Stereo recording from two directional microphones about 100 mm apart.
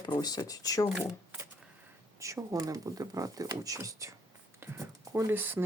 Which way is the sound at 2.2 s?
30° right (ahead or behind).